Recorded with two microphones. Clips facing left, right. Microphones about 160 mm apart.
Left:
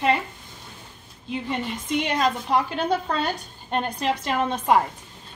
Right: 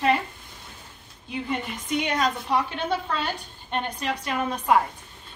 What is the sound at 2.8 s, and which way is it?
A woman's voice, 40° left (ahead or behind).